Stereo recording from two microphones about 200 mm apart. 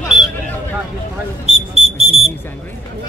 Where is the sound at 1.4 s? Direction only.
35° right (ahead or behind).